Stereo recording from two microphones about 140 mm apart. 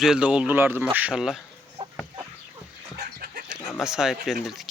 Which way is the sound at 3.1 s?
90° right.